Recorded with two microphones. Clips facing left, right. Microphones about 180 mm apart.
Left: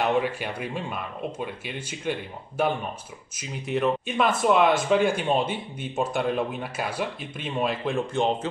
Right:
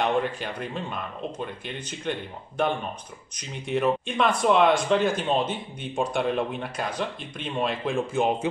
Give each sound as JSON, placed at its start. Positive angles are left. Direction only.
{"t": 0.0, "sound": "speech", "side_deg": 5}